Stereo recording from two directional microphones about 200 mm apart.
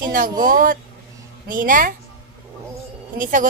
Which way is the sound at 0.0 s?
45° right (ahead or behind).